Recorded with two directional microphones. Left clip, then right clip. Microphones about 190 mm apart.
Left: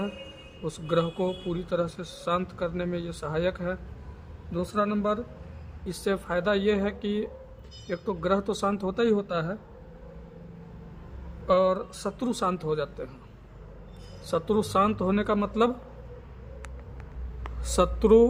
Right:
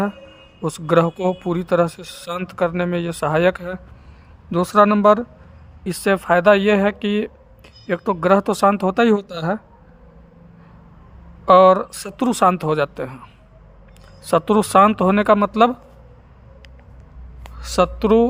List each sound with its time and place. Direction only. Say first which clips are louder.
0.6 s speech: right 10 dB; 45° right (ahead or behind)
11.4 s speech: right 12 dB; 55° right (ahead or behind)
14.3 s speech: right 10 dB; 40° right (ahead or behind)
17.6 s a man's voice: right 6 dB; 30° right (ahead or behind)